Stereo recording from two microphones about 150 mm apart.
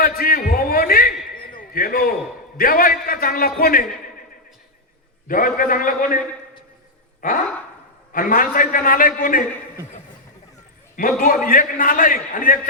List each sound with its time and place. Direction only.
0.0 s a sound: 75° left (ahead or behind)
2.6 s a man's voice: 75° left (ahead or behind)
5.3 s a man's voice: 65° left (ahead or behind)
7.2 s a man's voice: 65° left (ahead or behind)
11.2 s a man's voice: 65° left (ahead or behind)